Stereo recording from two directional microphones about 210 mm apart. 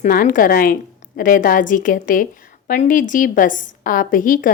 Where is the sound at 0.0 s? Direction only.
40° left (ahead or behind).